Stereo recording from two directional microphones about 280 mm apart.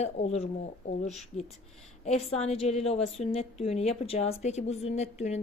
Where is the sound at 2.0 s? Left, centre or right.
Left.